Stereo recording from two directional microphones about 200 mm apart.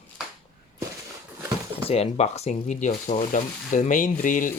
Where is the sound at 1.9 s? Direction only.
30° left (ahead or behind).